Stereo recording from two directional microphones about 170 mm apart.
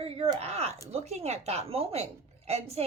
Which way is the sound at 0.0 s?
35° right (ahead or behind).